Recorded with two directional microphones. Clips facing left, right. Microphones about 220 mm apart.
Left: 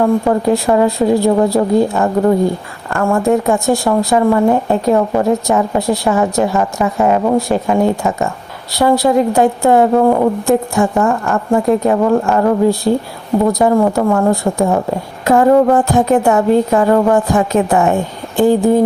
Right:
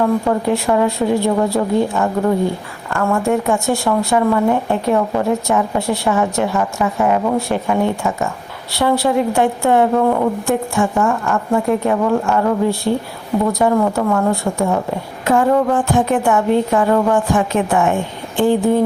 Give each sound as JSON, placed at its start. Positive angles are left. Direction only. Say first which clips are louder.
{"t": 0.3, "sound": "a woman's voice", "louder": "left 3 dB", "side_deg": 35}